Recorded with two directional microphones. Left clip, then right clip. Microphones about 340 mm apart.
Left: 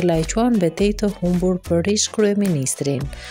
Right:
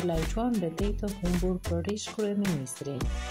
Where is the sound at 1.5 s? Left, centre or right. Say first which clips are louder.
Left 15 dB; left.